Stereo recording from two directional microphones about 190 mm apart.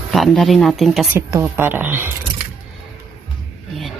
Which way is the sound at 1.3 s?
15° right (ahead or behind).